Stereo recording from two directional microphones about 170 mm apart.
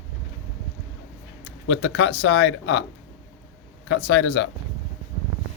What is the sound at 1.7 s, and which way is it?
Speech, 90° left.